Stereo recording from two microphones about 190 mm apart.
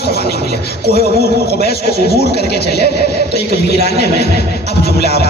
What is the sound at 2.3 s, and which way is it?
Speech, 60° left (ahead or behind).